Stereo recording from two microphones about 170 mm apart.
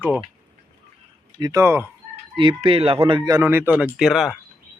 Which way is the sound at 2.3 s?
30° right (ahead or behind).